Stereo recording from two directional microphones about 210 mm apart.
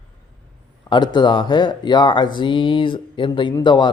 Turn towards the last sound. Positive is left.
turn(degrees=20)  # may be behind; listen again after turning